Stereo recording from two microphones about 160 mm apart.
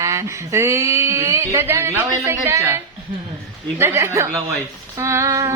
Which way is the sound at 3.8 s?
15° right (ahead or behind).